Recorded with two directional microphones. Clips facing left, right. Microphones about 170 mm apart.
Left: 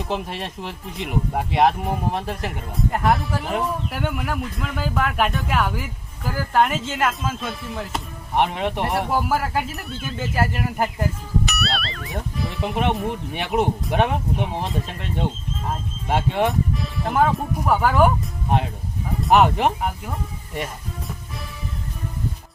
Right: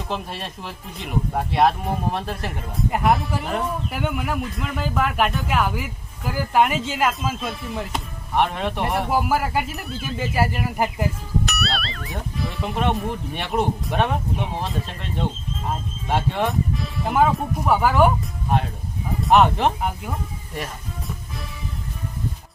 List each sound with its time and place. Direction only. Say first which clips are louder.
0.0 s speech: left 2 dB; 15° left (ahead or behind)
2.7 s speech: right 1 dB; centre (ahead or behind)
8.4 s speech: left 1 dB; 15° left (ahead or behind)
9.0 s speech: right 1 dB; 5° right (ahead or behind)
12.7 s speech: even; 15° left (ahead or behind)
16.0 s speech: left 2 dB; 15° left (ahead or behind)
16.5 s speech: left 1 dB; centre (ahead or behind)
19.3 s speech: even; 10° left (ahead or behind)